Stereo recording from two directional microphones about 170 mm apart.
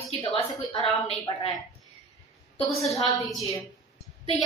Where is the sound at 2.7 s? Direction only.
Centre (ahead or behind).